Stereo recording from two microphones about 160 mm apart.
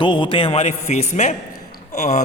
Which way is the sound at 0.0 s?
30° left (ahead or behind).